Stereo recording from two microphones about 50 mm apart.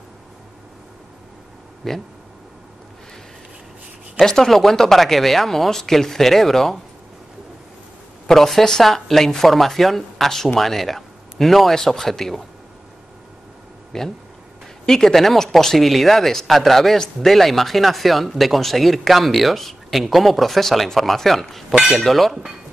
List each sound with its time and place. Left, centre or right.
1.8 s speech: centre
4.2 s speech: centre
8.3 s speech: centre
13.9 s speech: centre